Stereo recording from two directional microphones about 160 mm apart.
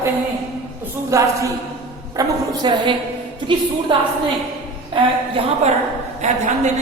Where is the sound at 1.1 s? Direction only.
20° right (ahead or behind).